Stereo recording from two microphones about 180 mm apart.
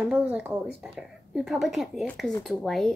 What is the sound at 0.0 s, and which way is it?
A woman's voice, 5° right (ahead or behind).